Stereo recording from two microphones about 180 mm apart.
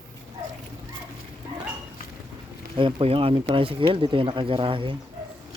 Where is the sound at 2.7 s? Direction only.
30° right (ahead or behind).